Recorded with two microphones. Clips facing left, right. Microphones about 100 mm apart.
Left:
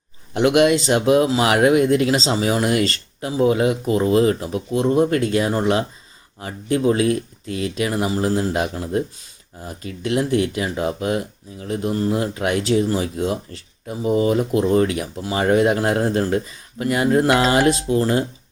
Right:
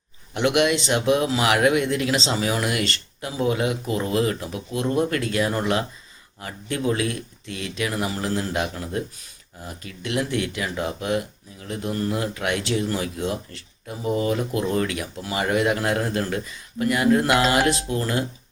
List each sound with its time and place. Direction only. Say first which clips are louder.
0.3 s speech: left 5 dB; 30° left (ahead or behind)